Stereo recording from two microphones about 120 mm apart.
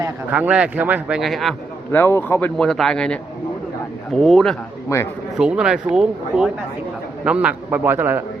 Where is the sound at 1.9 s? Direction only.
20° left (ahead or behind).